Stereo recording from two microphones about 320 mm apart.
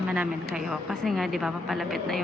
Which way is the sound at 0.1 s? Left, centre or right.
Centre.